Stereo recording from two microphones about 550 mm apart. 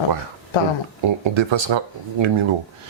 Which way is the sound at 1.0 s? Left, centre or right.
Right.